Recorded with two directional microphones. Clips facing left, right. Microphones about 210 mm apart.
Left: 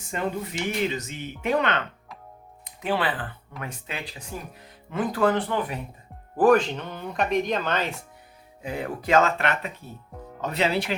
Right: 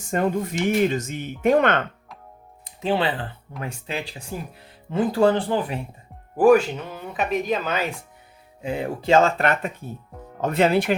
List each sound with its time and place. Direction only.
0.1 s speech: 45° right (ahead or behind)
2.6 s speech: 25° right (ahead or behind)
6.3 s speech: 10° right (ahead or behind)
8.6 s speech: 25° right (ahead or behind)
9.4 s speech: 40° right (ahead or behind)